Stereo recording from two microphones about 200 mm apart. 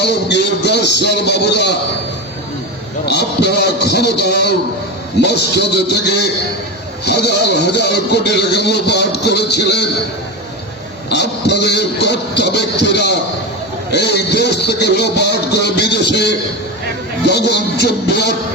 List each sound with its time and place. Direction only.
0.0 s a sound: 60° left (ahead or behind)
3.1 s speech: 55° left (ahead or behind)
11.1 s speech: 60° left (ahead or behind)